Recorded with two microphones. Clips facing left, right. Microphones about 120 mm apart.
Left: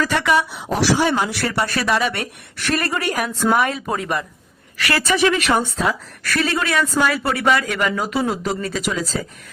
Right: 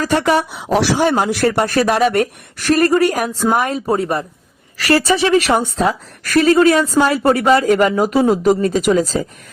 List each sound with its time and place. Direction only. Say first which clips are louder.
0.0 s a woman's voice: right 3 dB; 40° right (ahead or behind)
0.7 s a woman's voice: right 4 dB; 55° right (ahead or behind); by 9.2 s 40° right (ahead or behind)